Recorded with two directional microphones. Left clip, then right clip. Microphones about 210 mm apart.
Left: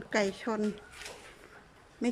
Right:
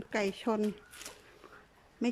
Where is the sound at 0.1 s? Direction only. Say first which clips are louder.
Left 3 dB; centre (ahead or behind).